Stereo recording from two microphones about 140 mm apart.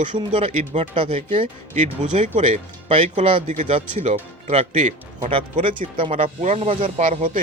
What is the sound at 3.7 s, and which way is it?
Speech, 50° right (ahead or behind).